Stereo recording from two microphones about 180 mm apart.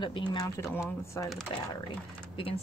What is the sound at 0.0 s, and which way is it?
Speech, 25° left (ahead or behind).